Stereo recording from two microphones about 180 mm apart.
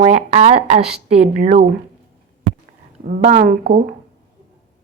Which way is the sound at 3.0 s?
50° right (ahead or behind).